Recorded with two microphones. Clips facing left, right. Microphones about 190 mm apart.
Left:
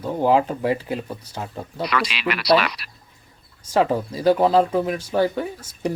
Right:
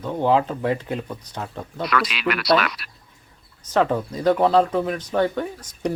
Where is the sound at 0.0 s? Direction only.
10° left (ahead or behind).